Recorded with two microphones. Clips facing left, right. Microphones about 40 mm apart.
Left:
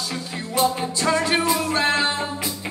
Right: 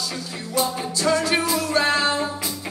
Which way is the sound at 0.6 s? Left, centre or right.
Left.